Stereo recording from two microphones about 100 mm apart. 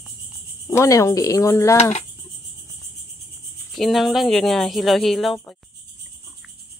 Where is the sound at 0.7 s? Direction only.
30° left (ahead or behind).